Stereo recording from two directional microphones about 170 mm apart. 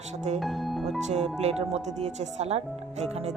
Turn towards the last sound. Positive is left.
turn(degrees=-40)  # may be behind; listen again after turning